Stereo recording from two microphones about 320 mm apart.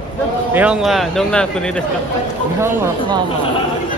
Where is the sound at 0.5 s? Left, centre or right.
Centre.